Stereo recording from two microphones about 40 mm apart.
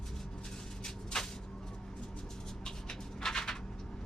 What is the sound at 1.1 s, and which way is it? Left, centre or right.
Vehicle, centre.